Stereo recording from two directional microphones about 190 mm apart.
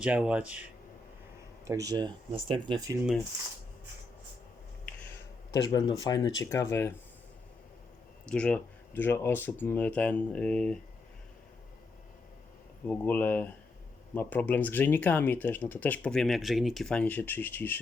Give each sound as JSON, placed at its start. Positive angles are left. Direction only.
{"t": 0.0, "sound": "speech", "side_deg": -5}
{"t": 1.6, "sound": "speech", "side_deg": -15}
{"t": 5.5, "sound": "speech", "side_deg": 15}
{"t": 8.3, "sound": "speech", "side_deg": 5}
{"t": 12.9, "sound": "speech", "side_deg": 10}